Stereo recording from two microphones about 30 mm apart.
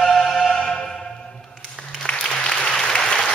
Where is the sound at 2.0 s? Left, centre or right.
Left.